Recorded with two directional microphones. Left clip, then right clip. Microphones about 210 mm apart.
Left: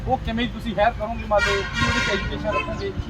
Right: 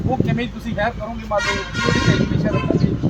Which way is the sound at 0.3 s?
10° right (ahead or behind).